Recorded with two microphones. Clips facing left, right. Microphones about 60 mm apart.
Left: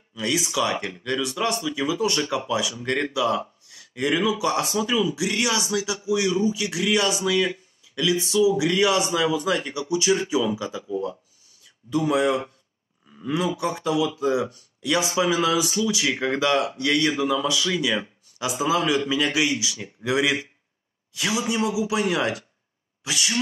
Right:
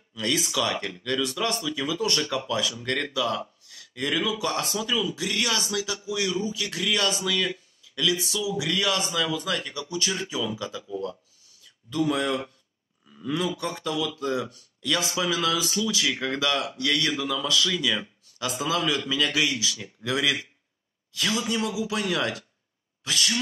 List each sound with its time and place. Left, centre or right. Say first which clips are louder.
0.1 s speech: left 2 dB; centre
13.1 s a sound: left 2 dB; left
13.6 s speech: left 5 dB; centre